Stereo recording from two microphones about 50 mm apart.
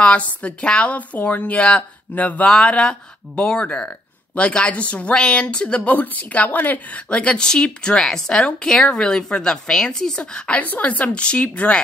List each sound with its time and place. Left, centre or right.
0.0 s a woman's voice: left
2.4 s a woman's voice: centre; by 7.0 s left
7.1 s a woman's voice: left